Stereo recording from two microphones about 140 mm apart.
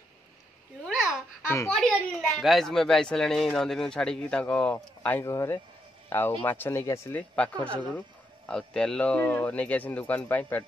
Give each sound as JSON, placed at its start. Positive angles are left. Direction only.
{"t": 1.7, "sound": "speech", "side_deg": 5}
{"t": 5.2, "sound": "a man's voice", "side_deg": 20}